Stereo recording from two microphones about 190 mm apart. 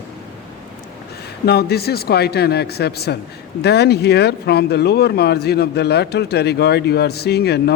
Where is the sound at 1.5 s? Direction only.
55° left (ahead or behind).